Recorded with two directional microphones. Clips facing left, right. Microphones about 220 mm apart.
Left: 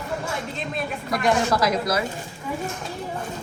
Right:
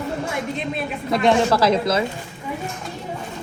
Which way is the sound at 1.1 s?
25° right (ahead or behind).